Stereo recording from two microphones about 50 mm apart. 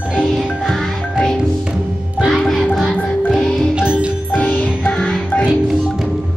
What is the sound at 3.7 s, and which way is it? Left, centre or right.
Music, centre.